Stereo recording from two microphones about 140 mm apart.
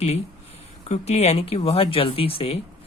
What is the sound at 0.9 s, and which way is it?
Speech, 50° left (ahead or behind).